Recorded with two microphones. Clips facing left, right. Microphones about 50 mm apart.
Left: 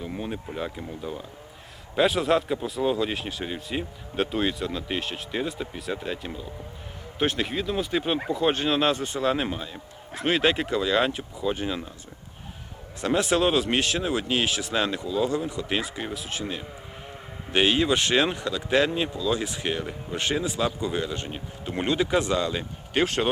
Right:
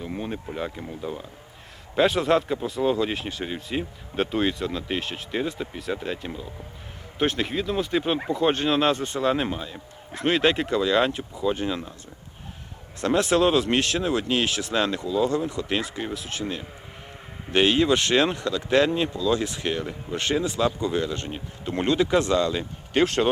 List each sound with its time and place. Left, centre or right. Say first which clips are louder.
0.0 s speech: right 1 dB; centre
13.0 s speech: right 2 dB; centre